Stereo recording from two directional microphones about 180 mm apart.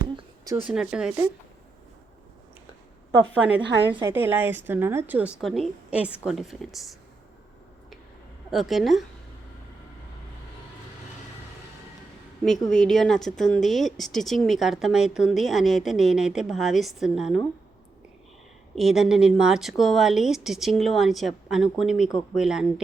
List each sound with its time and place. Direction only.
0.0 s a sound: 20° right (ahead or behind)
0.6 s a woman's voice: 5° right (ahead or behind)
4.1 s a woman's voice: 10° right (ahead or behind)
8.4 s a woman's voice: centre (ahead or behind)
12.5 s a woman's voice: centre (ahead or behind)
18.7 s a woman's voice: centre (ahead or behind)